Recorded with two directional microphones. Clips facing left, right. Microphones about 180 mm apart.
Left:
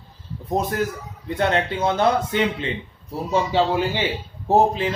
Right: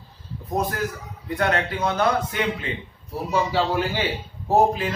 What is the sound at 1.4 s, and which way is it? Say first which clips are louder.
A man's voice: left 2 dB; 25° left (ahead or behind).